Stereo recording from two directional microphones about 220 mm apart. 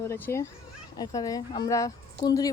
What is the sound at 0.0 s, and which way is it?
A child's voice, 10° left (ahead or behind).